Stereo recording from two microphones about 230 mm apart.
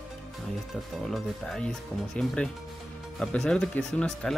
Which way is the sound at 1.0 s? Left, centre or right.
Centre.